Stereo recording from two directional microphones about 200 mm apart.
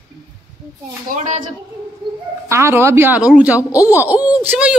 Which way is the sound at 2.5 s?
15° right (ahead or behind).